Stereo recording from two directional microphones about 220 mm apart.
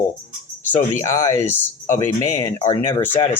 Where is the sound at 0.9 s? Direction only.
10° left (ahead or behind).